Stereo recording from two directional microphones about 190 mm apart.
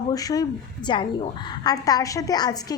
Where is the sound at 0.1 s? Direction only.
20° left (ahead or behind).